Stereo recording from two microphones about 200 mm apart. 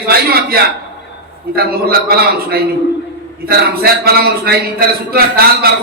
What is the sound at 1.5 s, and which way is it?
Speech, 50° right (ahead or behind).